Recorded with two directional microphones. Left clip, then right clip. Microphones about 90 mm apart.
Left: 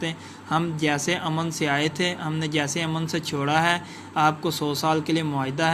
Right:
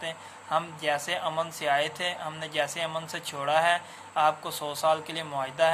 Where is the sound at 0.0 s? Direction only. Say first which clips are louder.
Left 4 dB; 30° left (ahead or behind).